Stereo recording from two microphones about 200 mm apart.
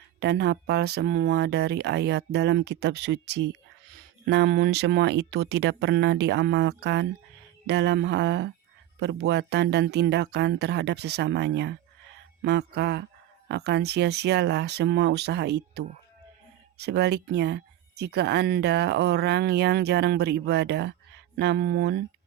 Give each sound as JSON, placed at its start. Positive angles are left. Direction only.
{"t": 0.2, "sound": "speech", "side_deg": -55}